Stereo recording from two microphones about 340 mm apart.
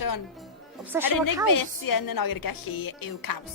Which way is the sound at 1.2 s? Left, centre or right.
Left.